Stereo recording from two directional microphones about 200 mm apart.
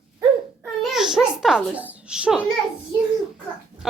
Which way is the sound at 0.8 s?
Centre (ahead or behind).